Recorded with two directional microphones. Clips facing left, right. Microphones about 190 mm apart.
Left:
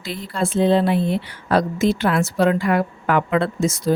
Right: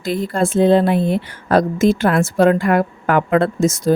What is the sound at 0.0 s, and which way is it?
Speech, 45° right (ahead or behind).